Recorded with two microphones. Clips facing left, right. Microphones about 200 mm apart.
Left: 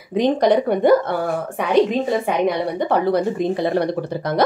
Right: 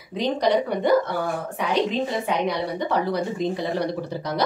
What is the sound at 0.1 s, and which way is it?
Speech, 55° left (ahead or behind).